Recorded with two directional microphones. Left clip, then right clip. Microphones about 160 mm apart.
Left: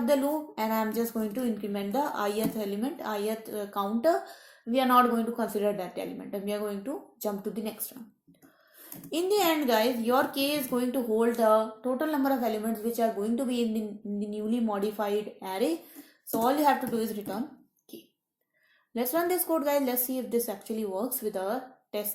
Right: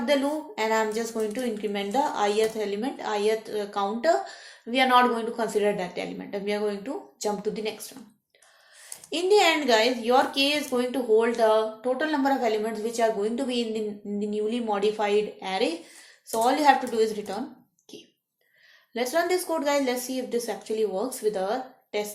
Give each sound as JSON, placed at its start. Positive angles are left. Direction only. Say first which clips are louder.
{"t": 0.0, "sound": "speech", "louder": "right 2 dB", "side_deg": 50}
{"t": 9.0, "sound": "speech", "louder": "right 5 dB", "side_deg": 50}
{"t": 18.9, "sound": "speech", "louder": "right 3 dB", "side_deg": 50}